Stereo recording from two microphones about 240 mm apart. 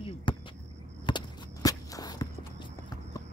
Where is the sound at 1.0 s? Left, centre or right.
Centre.